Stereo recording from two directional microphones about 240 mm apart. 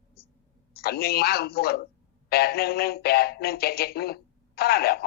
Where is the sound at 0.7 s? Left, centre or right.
Left.